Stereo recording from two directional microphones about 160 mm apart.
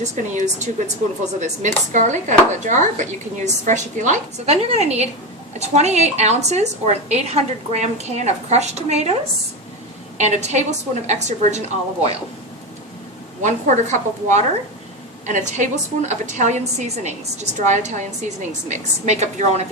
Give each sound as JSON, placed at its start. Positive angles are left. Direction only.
{"t": 0.0, "sound": "speech", "side_deg": -50}
{"t": 10.2, "sound": "speech", "side_deg": -45}
{"t": 13.4, "sound": "speech", "side_deg": -50}